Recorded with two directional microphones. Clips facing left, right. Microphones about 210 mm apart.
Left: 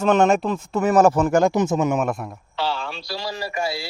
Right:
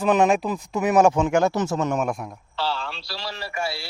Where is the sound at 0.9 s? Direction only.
15° right (ahead or behind).